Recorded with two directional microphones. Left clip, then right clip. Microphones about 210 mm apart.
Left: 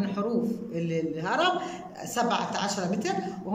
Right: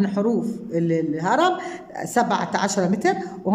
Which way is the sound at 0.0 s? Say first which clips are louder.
Right 6 dB; 35° right (ahead or behind).